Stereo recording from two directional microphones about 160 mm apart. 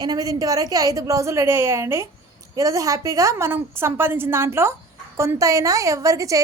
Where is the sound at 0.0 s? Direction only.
25° right (ahead or behind).